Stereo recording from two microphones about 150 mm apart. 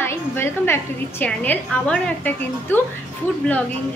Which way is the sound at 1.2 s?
10° left (ahead or behind).